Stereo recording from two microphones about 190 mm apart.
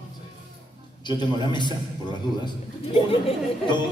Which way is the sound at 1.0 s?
25° left (ahead or behind).